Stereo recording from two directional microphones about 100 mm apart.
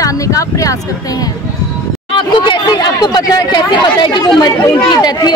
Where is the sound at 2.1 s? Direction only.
55° left (ahead or behind).